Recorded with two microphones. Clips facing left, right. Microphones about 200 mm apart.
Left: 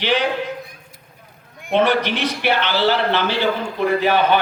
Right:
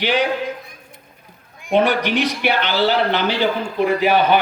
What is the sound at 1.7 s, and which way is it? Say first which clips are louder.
A man's voice: right 1 dB; 10° right (ahead or behind).